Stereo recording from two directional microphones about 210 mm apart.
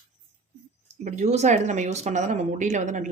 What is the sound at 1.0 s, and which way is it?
Speech, 35° right (ahead or behind).